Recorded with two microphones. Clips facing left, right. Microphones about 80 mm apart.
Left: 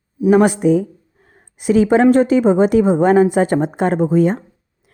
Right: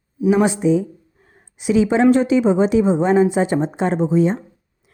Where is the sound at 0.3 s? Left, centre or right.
Left.